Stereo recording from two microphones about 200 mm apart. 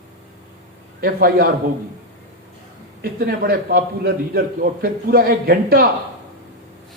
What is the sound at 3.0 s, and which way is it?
A man's voice, 50° right (ahead or behind).